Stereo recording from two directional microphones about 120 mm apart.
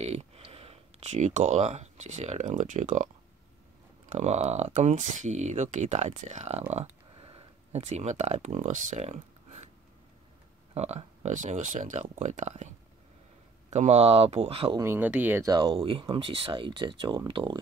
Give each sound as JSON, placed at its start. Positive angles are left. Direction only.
{"t": 0.0, "sound": "speech", "side_deg": -60}
{"t": 4.1, "sound": "speech", "side_deg": -70}
{"t": 6.7, "sound": "speech", "side_deg": -60}
{"t": 10.7, "sound": "speech", "side_deg": -60}
{"t": 14.8, "sound": "speech", "side_deg": -20}
{"t": 15.4, "sound": "speech", "side_deg": -40}